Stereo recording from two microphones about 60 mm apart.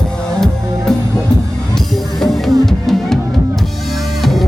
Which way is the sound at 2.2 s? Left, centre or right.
Centre.